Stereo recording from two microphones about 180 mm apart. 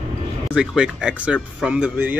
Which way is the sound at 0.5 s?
5° right (ahead or behind).